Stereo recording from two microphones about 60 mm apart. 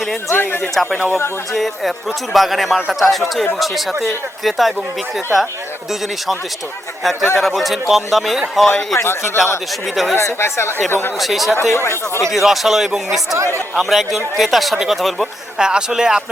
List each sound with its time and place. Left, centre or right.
0.3 s a man's voice: left
0.7 s a man's voice: centre
7.0 s a man's voice: centre
9.0 s a man's voice: left
9.8 s a man's voice: centre
10.2 s speech: left
11.2 s a man's voice: centre
11.7 s speech: left
12.3 s a man's voice: centre
13.3 s speech: right
13.7 s a man's voice: centre
15.5 s speech: centre